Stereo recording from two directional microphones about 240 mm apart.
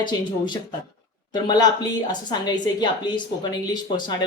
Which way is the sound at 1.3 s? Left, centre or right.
Centre.